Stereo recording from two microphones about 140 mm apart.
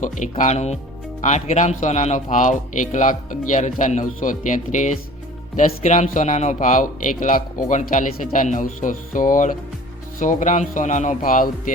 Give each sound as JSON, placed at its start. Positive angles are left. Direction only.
{"t": 0.0, "sound": "speech", "side_deg": 60}